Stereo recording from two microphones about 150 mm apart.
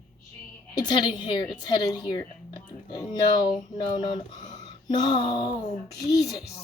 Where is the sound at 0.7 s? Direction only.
30° left (ahead or behind).